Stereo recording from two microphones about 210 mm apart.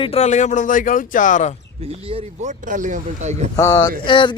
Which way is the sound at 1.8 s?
30° right (ahead or behind).